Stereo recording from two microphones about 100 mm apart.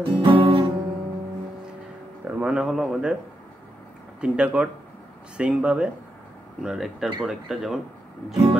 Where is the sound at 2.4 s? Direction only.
10° right (ahead or behind).